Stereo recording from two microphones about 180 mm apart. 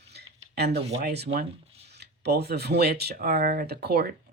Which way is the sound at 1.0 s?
65° right (ahead or behind).